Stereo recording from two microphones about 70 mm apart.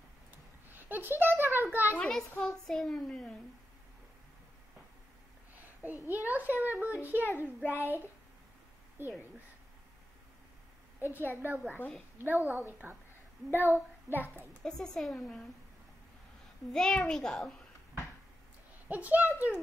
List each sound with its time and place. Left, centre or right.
0.7 s a sound: right
2.0 s a child's voice: centre
5.8 s a child's voice: right
11.0 s a child's voice: right
14.6 s speech: centre
16.7 s a child's voice: centre
18.9 s a child's voice: right